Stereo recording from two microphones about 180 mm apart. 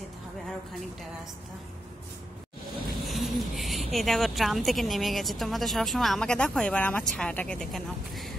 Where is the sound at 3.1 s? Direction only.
Centre (ahead or behind).